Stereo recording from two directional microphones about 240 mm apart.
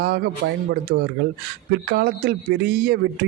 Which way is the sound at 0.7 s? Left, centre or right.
Right.